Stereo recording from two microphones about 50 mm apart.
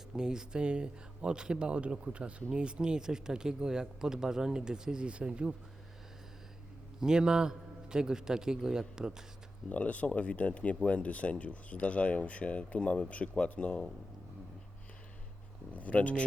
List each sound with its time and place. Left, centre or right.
0.2 s speech: centre
7.0 s speech: centre
9.6 s speech: left
15.7 s speech: left